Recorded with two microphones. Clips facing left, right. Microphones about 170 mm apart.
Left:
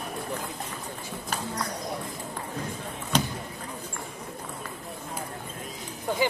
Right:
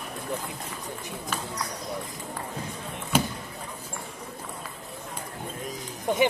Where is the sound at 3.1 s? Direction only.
5° right (ahead or behind).